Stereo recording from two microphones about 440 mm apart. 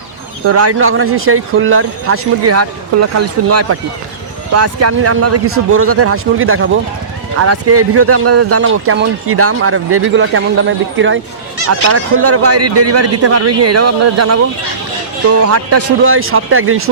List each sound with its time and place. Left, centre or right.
0.4 s a man's voice: right